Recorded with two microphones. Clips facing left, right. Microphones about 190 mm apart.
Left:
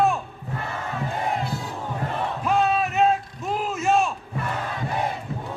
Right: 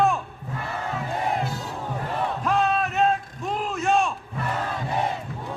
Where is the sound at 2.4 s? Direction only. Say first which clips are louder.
Left 2 dB; 5° left (ahead or behind).